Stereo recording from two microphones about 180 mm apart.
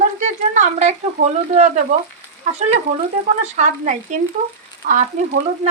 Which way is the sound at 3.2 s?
40° right (ahead or behind).